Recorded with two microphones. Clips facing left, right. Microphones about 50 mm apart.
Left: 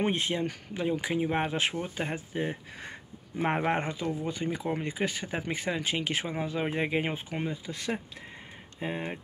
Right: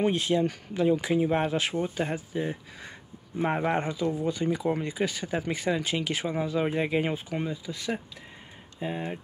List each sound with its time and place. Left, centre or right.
0.0 s speech: left
0.4 s speech: centre
2.1 s speech: left
7.6 s speech: left
8.7 s speech: left